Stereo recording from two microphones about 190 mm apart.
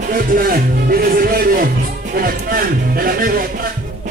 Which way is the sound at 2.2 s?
50° right (ahead or behind).